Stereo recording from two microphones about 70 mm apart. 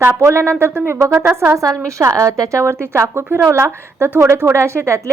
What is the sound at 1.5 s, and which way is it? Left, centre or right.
A woman's voice, right.